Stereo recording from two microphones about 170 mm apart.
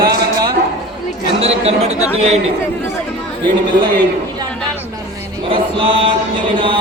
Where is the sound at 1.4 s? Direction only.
35° right (ahead or behind).